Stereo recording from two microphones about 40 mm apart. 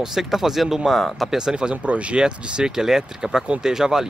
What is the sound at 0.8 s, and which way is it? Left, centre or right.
Speech, centre.